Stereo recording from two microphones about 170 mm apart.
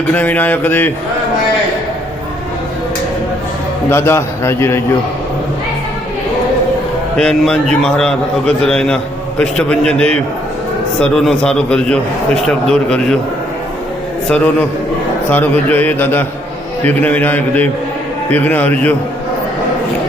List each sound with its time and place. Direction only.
0.1 s a man's voice: 10° left (ahead or behind)
3.8 s a man's voice: 15° left (ahead or behind)
7.2 s a man's voice: 5° left (ahead or behind)
14.3 s a man's voice: 5° left (ahead or behind)